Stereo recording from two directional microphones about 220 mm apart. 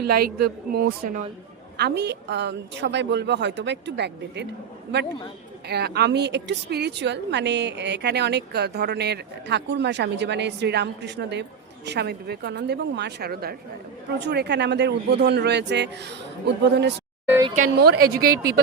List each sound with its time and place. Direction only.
0.1 s a woman's voice: 45° right (ahead or behind)
5.6 s a woman's voice: 50° right (ahead or behind)
17.2 s speech: 10° right (ahead or behind)
17.7 s a woman's voice: 45° right (ahead or behind)